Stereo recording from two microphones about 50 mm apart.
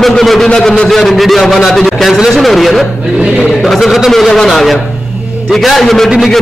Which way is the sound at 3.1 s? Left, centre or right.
Centre.